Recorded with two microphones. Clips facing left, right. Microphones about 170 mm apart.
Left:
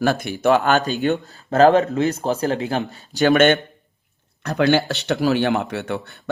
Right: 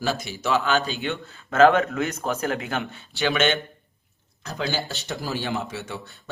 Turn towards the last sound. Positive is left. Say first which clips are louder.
# left 8 dB
turn(degrees=60)  # may be behind; listen again after turning